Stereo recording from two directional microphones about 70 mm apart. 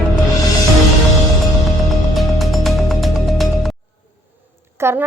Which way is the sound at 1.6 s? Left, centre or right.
Centre.